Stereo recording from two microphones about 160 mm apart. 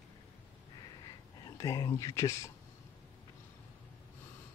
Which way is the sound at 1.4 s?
20° left (ahead or behind).